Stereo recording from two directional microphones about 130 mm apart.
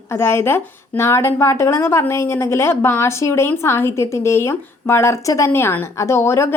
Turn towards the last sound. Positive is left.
turn(degrees=20)  # may be behind; listen again after turning